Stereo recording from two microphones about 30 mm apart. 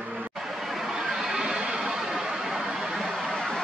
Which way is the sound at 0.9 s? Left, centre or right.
Right.